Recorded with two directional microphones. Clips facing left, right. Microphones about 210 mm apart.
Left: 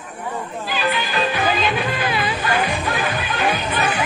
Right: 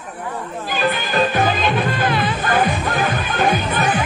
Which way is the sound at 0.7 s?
50° right (ahead or behind).